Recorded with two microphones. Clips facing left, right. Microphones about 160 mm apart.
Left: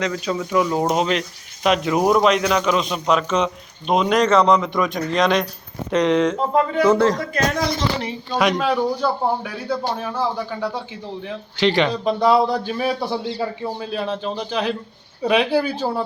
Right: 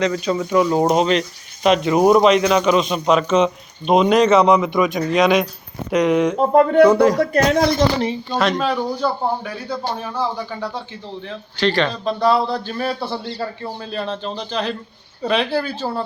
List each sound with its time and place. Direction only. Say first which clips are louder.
0.0 s a man's voice: right 4 dB; centre (ahead or behind)
6.5 s speech: right 7 dB; 50° right (ahead or behind)
8.3 s a man's voice: left 3 dB; 15° left (ahead or behind)
11.3 s a man's voice: left 1 dB; 20° left (ahead or behind)